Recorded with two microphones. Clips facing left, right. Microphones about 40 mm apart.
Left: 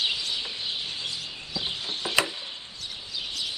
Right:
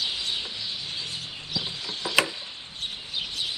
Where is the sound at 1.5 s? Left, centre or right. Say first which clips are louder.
Left 1 dB; left.